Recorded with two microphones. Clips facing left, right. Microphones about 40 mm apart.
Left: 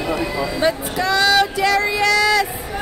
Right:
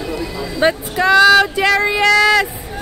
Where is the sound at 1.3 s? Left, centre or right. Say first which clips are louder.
Right 4 dB; right.